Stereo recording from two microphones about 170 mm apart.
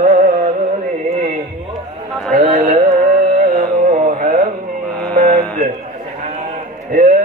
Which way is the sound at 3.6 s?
40° right (ahead or behind).